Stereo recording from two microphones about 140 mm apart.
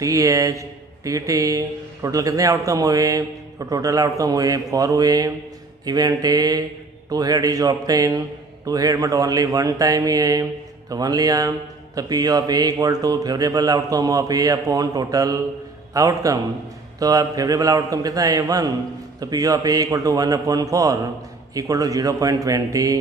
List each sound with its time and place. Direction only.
0.0 s speech: 25° right (ahead or behind)